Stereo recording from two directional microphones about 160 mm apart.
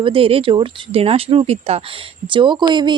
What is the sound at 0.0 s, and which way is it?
A woman's voice, 35° right (ahead or behind).